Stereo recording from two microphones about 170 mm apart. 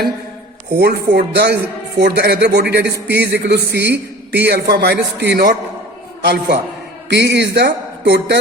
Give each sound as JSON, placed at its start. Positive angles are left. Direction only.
{"t": 0.7, "sound": "a man's voice", "side_deg": -70}
{"t": 6.2, "sound": "a man's voice", "side_deg": -65}
{"t": 7.1, "sound": "a man's voice", "side_deg": -80}